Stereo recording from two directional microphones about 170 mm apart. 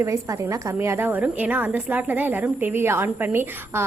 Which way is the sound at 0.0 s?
15° right (ahead or behind).